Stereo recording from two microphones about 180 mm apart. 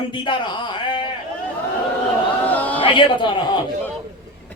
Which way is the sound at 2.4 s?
10° left (ahead or behind).